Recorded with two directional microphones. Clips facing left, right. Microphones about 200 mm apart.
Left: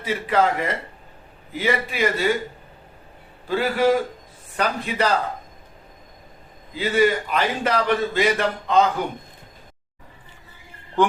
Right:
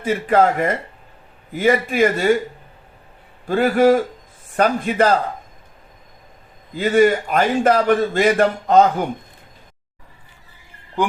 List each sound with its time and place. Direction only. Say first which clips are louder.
0.0 s a man's voice: right 5 dB; 50° right (ahead or behind)
3.4 s a man's voice: right 5 dB; 50° right (ahead or behind)
6.7 s a man's voice: right 5 dB; 50° right (ahead or behind)